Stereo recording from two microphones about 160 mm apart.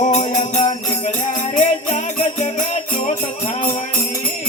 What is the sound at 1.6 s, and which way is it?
Jingle bell, 50° left (ahead or behind).